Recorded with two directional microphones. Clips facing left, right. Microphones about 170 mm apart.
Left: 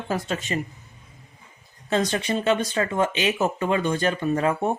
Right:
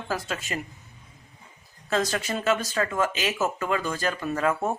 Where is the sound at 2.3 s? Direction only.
30° left (ahead or behind).